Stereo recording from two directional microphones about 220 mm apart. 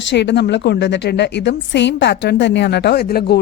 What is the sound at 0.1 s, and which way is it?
A woman's voice, 50° left (ahead or behind).